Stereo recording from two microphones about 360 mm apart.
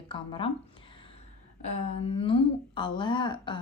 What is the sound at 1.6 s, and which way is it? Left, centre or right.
Speech, centre.